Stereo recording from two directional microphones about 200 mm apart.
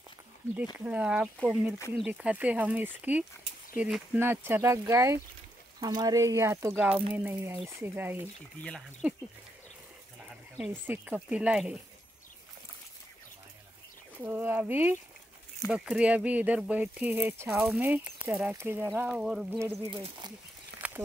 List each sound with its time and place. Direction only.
0.7 s speech: 5° right (ahead or behind)
10.2 s speech: 5° right (ahead or behind)
14.2 s speech: 10° right (ahead or behind)
19.9 s speech: 25° right (ahead or behind)
20.7 s a sound: 55° right (ahead or behind)